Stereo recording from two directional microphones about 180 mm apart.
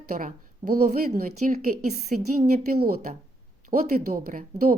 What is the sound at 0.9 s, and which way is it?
A woman's voice, 45° right (ahead or behind).